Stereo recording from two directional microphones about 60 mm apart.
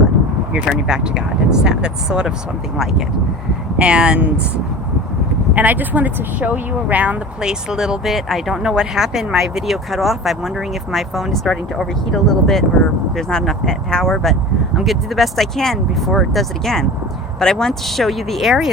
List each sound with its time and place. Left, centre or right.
0.7 s speech: centre
3.8 s speech: centre
5.5 s speech: right
7.4 s speech: centre